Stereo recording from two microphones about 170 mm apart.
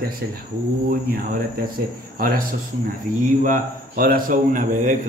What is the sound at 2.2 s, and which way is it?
Speech, 60° right (ahead or behind).